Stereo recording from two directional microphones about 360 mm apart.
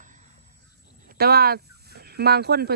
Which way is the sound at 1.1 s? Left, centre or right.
Right.